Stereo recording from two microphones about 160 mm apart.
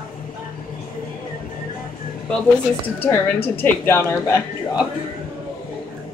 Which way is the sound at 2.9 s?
15° left (ahead or behind).